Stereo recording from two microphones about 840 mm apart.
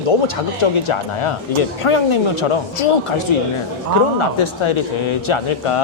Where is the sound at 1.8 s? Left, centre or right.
Left.